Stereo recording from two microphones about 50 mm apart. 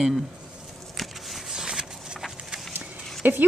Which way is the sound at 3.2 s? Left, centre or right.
Right.